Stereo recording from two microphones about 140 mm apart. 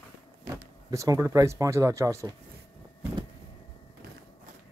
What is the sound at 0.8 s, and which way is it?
Speech, 25° right (ahead or behind).